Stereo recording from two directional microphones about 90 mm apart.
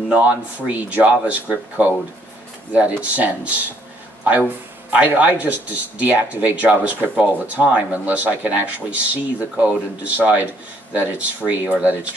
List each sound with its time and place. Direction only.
0.1 s speech: 15° right (ahead or behind)
3.0 s speech: 15° right (ahead or behind)